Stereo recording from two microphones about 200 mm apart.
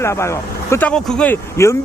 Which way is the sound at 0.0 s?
15° left (ahead or behind).